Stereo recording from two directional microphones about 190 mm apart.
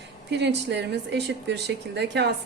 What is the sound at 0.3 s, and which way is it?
Speech, 65° right (ahead or behind).